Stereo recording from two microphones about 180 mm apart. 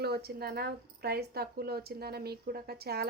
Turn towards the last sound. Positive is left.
turn(degrees=-60)  # may be behind; listen again after turning